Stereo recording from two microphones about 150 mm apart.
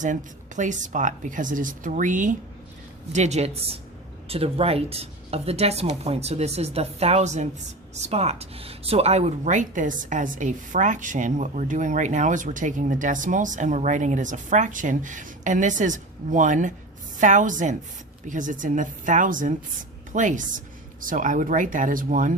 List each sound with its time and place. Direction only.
0.0 s speech: 55° right (ahead or behind)